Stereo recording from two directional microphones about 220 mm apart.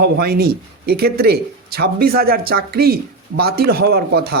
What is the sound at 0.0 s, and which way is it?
Speech, 45° right (ahead or behind).